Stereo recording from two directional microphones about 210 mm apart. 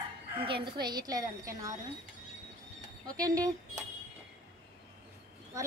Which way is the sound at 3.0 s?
15° right (ahead or behind).